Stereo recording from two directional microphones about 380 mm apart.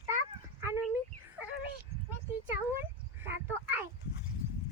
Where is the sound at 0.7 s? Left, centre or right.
Centre.